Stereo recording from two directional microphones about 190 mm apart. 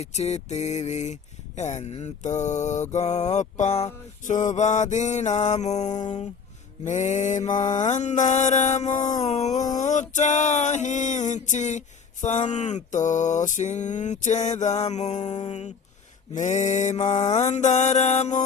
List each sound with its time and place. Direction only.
0.0 s mantra: 35° left (ahead or behind)